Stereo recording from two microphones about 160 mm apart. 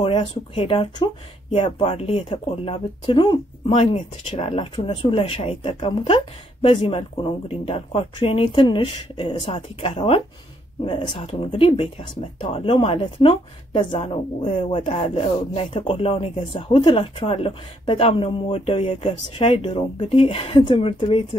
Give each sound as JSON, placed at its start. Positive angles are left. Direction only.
{"t": 0.0, "sound": "speech", "side_deg": 35}